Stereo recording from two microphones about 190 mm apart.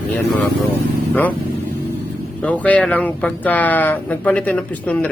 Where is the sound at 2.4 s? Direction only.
10° left (ahead or behind).